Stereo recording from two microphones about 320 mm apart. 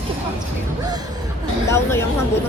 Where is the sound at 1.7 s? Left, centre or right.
Centre.